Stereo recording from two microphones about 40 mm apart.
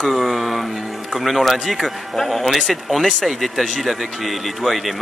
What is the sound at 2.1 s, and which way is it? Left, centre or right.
A man's voice, centre.